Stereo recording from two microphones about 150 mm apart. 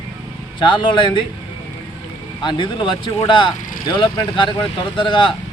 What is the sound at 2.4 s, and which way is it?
Speech, 30° left (ahead or behind).